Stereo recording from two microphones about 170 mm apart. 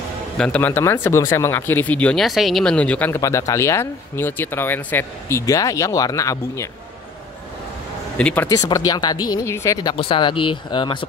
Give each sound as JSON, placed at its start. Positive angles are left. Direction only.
{"t": 0.4, "sound": "speech", "side_deg": 10}
{"t": 8.2, "sound": "speech", "side_deg": 5}
{"t": 8.5, "sound": "speech", "side_deg": 20}